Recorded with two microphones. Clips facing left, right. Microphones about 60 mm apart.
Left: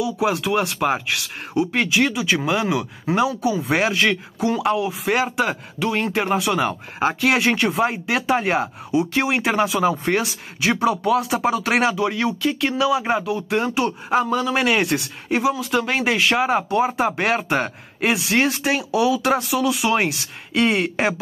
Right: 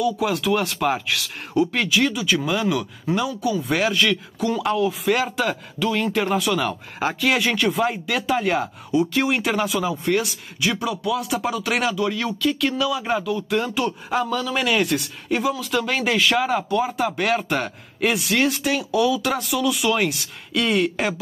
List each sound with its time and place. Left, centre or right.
0.0 s speech: centre
4.6 s speech: centre